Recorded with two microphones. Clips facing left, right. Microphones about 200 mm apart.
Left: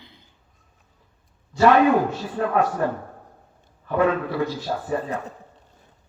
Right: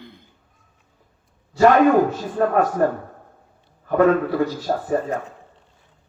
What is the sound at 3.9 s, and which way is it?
A man's voice, 45° right (ahead or behind).